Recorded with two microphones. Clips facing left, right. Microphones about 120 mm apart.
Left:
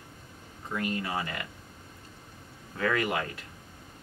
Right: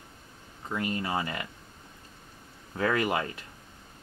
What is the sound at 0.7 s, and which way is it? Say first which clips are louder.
Speech: right 1 dB; 20° right (ahead or behind).